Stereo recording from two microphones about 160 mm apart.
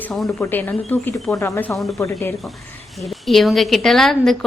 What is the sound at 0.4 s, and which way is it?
Speech, 15° left (ahead or behind).